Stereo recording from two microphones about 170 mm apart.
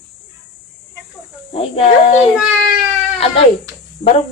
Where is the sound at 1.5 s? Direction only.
35° left (ahead or behind).